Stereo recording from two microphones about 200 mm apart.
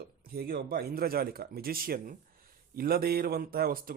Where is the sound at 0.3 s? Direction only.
50° right (ahead or behind).